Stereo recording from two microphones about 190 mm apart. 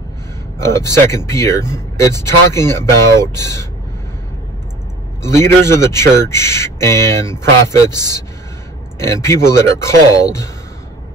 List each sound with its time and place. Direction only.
0.6 s speech: 15° left (ahead or behind)
5.2 s speech: 15° left (ahead or behind)
9.0 s speech: 15° left (ahead or behind)